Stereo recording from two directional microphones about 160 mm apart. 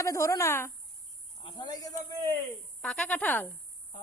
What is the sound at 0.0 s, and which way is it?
Speech, 20° left (ahead or behind).